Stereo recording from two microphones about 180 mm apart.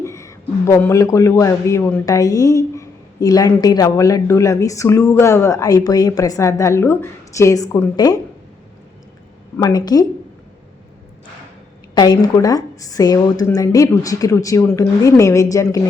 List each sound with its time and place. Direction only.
0.0 s a man's voice: 15° left (ahead or behind)
9.6 s a woman's voice: 20° left (ahead or behind)
11.9 s a woman's voice: 20° left (ahead or behind)